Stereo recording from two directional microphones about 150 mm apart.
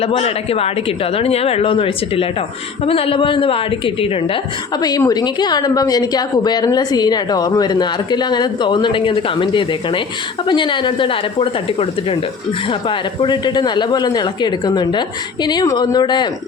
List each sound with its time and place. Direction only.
0.0 s speech: 40° left (ahead or behind)
4.8 s a woman's voice: 25° left (ahead or behind)